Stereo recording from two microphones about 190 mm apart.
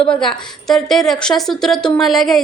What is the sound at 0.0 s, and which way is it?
A woman's voice, 5° left (ahead or behind).